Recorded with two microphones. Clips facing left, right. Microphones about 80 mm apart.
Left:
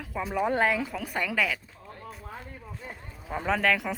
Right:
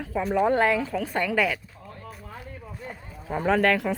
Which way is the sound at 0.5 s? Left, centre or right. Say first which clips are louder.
Right 4 dB; centre.